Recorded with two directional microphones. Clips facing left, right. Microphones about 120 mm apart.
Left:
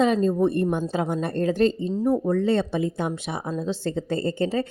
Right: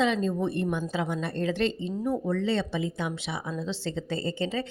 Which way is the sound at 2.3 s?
50° left (ahead or behind).